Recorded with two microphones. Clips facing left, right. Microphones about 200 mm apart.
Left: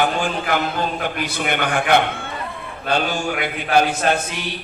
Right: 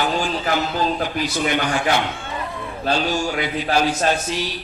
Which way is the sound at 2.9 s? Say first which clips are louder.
Left 1 dB; 55° left (ahead or behind).